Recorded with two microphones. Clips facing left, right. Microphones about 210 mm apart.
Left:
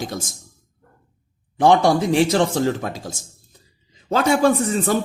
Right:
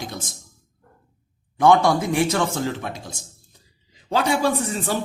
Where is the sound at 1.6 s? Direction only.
30° left (ahead or behind).